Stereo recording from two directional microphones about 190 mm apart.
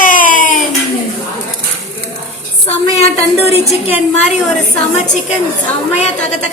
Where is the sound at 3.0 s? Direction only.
35° left (ahead or behind).